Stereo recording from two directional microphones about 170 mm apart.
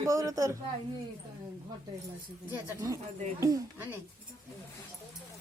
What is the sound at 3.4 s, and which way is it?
Speech, 20° right (ahead or behind).